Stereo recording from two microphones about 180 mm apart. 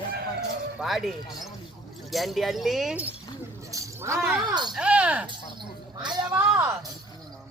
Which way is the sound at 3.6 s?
15° right (ahead or behind).